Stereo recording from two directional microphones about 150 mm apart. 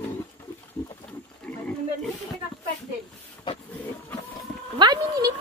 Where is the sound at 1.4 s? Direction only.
10° left (ahead or behind).